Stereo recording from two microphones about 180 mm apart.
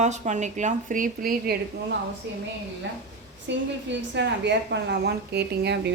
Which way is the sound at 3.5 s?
80° right.